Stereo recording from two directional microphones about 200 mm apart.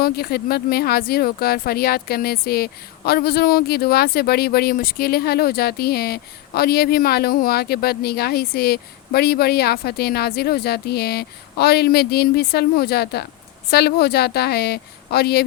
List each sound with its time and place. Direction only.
0.0 s speech: 50° left (ahead or behind)